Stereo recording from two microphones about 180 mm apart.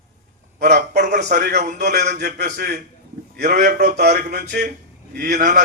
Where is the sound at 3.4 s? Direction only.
45° right (ahead or behind).